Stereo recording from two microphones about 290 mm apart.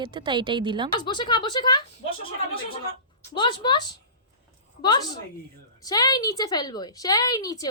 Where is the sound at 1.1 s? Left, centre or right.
Centre.